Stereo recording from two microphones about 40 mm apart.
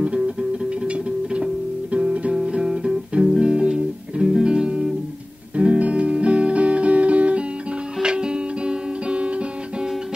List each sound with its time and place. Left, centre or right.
0.4 s music: right
2.3 s music: centre
5.6 s music: right